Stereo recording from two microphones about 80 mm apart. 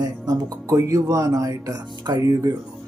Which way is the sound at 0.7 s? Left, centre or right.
Right.